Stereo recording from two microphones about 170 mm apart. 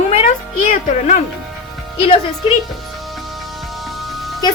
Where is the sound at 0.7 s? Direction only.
45° left (ahead or behind).